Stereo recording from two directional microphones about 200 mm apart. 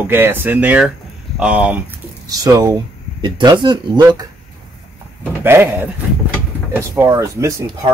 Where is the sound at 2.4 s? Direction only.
20° right (ahead or behind).